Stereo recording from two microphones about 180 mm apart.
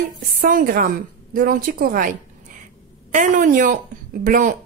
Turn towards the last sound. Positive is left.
turn(degrees=-50)  # may be behind; listen again after turning